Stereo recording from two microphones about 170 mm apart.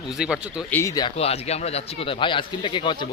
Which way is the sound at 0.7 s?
15° left (ahead or behind).